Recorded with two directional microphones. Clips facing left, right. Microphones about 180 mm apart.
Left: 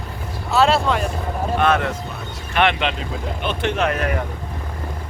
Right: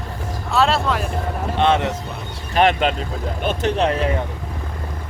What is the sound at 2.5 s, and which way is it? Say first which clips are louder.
Speech: right 3 dB; 40° right (ahead or behind).